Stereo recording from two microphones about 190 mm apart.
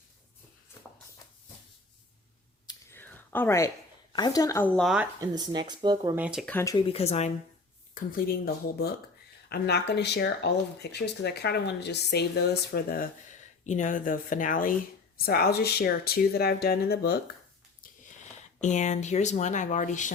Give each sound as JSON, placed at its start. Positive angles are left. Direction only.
{"t": 2.6, "sound": "whispering", "side_deg": 10}
{"t": 4.1, "sound": "a woman's voice", "side_deg": 20}
{"t": 4.8, "sound": "speech", "side_deg": 0}
{"t": 5.2, "sound": "speech", "side_deg": -20}
{"t": 6.1, "sound": "speech", "side_deg": -5}
{"t": 6.4, "sound": "speech", "side_deg": 10}
{"t": 6.7, "sound": "speech", "side_deg": 30}
{"t": 7.9, "sound": "speech", "side_deg": 50}
{"t": 18.2, "sound": "speech", "side_deg": 40}